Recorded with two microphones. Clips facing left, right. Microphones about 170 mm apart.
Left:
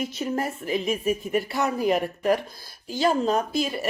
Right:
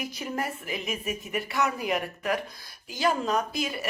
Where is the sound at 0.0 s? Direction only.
25° left (ahead or behind).